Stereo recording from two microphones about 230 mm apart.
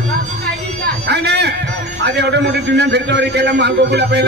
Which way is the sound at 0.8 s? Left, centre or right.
Right.